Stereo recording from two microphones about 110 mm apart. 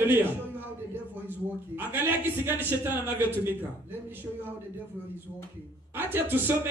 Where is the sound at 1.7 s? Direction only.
20° right (ahead or behind).